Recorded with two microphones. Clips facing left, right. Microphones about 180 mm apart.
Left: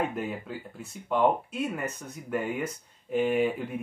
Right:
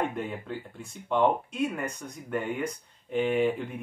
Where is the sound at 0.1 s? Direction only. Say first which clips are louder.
Even; 5° left (ahead or behind).